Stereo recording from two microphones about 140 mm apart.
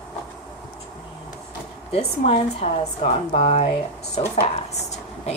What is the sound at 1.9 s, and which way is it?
Speech, 45° left (ahead or behind).